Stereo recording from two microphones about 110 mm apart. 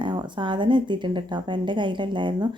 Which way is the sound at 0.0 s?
45° right (ahead or behind).